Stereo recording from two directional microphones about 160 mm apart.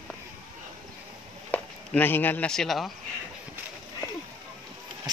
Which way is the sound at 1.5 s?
10° left (ahead or behind).